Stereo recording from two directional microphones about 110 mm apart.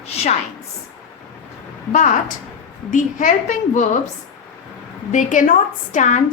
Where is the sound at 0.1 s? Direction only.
70° left (ahead or behind).